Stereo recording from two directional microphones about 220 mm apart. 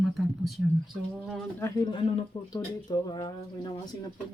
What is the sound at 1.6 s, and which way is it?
A man's voice, 20° left (ahead or behind).